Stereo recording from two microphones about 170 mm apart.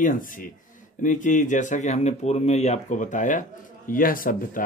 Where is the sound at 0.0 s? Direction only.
50° left (ahead or behind).